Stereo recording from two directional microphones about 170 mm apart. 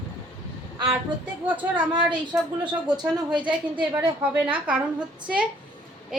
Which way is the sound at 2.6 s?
25° right (ahead or behind).